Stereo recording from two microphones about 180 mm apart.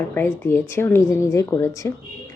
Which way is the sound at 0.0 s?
10° left (ahead or behind).